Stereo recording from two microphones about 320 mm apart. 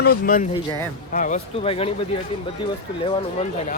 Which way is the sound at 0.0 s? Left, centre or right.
Left.